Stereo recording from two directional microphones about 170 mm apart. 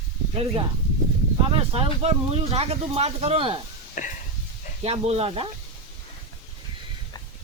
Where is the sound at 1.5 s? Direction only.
35° right (ahead or behind).